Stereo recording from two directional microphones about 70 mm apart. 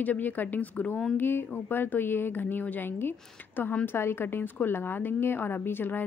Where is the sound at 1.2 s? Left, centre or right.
Left.